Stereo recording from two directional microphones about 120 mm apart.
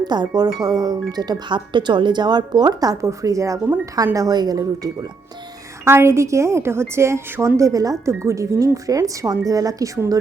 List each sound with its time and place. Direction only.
0.0 s a woman's voice: 35° right (ahead or behind)